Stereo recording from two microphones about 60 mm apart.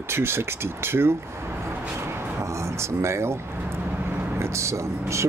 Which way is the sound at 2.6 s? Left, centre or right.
Right.